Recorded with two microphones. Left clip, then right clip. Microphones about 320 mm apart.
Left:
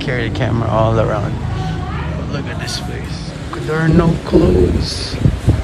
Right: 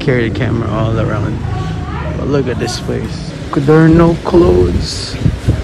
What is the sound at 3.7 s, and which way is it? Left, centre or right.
Speech, centre.